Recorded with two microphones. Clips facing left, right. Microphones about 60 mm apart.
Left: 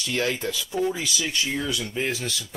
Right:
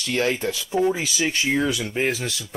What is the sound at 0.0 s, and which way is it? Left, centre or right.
Speech, right.